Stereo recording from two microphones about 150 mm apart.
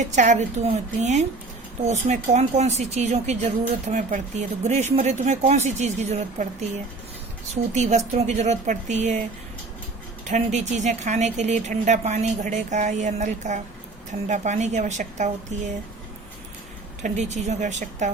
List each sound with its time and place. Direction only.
0.2 s speech: 50° right (ahead or behind)
10.2 s speech: 50° right (ahead or behind)
17.0 s speech: 50° right (ahead or behind)